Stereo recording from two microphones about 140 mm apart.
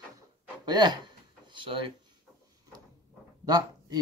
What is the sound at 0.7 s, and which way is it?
Speech, 30° right (ahead or behind).